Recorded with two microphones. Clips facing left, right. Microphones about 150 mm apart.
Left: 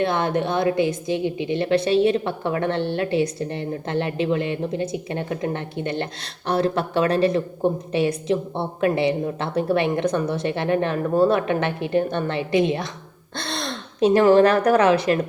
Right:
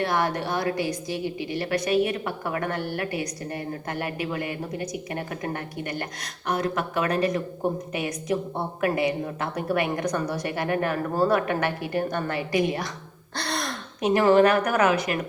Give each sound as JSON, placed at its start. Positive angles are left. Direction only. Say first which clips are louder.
{"t": 0.0, "sound": "a woman's voice", "louder": "left 4 dB", "side_deg": 20}